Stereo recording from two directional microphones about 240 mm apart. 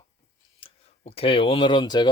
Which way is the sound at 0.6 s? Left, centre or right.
Left.